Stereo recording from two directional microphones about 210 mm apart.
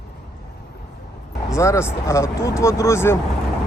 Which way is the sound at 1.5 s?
15° left (ahead or behind).